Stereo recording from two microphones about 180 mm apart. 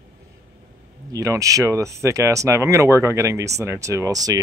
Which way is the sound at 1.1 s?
20° right (ahead or behind).